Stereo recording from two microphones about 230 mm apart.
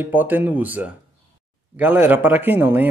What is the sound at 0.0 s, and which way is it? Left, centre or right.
Speech, centre.